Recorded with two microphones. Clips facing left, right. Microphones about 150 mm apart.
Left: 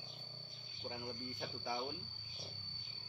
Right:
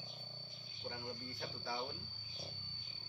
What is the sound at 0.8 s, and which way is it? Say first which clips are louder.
Speech: left 1 dB; 15° left (ahead or behind).